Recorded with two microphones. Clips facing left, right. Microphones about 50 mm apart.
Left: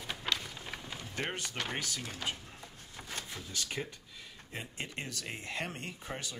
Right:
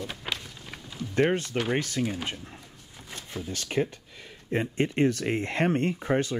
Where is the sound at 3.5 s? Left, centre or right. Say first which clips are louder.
Right 11 dB; right.